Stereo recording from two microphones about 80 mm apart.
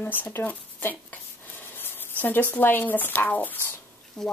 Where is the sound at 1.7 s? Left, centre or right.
Left.